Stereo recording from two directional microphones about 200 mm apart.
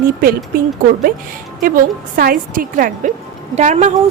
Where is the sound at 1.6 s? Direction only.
45° right (ahead or behind).